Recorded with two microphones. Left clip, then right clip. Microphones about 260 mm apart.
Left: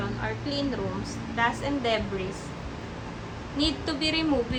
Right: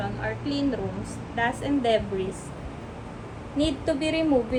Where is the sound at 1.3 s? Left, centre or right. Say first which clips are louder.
Right 1 dB; right.